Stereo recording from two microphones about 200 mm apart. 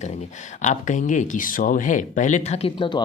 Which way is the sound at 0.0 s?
35° left (ahead or behind).